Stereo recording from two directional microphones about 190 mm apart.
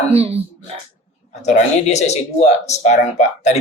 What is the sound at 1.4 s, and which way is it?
Speech, 35° left (ahead or behind).